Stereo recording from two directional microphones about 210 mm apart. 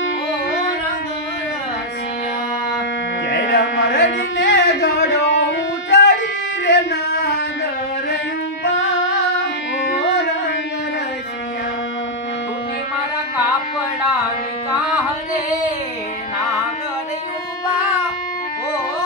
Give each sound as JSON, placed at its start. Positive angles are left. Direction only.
{"t": 3.3, "sound": "a sound", "side_deg": 55}
{"t": 6.6, "sound": "male singing", "side_deg": 55}
{"t": 9.8, "sound": "music", "side_deg": 60}